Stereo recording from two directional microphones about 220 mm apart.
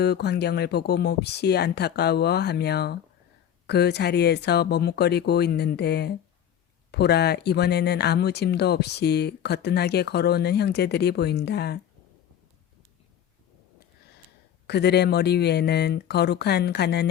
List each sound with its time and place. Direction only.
0.0 s speech: 50° left (ahead or behind)
14.7 s speech: 50° left (ahead or behind)